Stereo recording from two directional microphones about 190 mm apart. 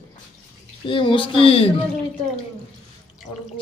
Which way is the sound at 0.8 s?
25° left (ahead or behind).